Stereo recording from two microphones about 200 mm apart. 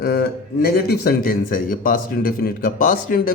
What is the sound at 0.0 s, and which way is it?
Speech, 50° left (ahead or behind).